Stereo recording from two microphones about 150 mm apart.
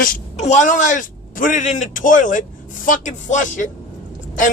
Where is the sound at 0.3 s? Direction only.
50° left (ahead or behind).